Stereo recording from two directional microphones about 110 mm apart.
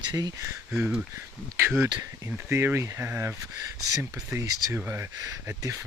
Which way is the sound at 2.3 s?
20° right (ahead or behind).